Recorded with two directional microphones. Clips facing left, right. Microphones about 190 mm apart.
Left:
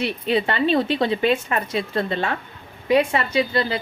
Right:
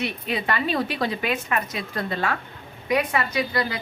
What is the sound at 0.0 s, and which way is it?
Speech, 30° left (ahead or behind).